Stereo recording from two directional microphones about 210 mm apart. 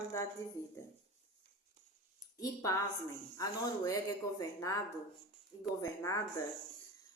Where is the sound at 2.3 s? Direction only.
15° left (ahead or behind).